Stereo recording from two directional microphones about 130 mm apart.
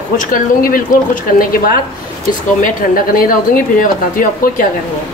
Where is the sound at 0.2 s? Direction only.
90° left.